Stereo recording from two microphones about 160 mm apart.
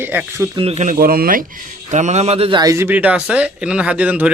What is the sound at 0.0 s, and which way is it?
Speech, 10° right (ahead or behind).